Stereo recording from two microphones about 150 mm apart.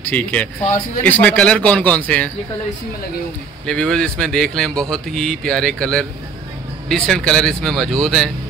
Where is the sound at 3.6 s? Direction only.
5° left (ahead or behind).